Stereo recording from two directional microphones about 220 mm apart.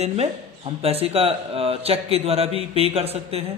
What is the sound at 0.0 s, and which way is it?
Speech, 30° right (ahead or behind).